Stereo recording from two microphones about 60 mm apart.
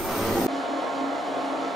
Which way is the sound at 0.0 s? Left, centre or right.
Centre.